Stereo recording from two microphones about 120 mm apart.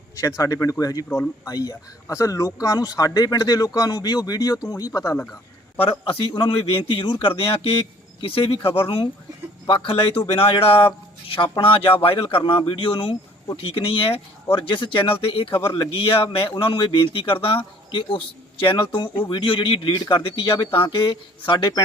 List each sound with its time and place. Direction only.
0.2 s speech: 25° left (ahead or behind)
5.8 s speech: 50° left (ahead or behind)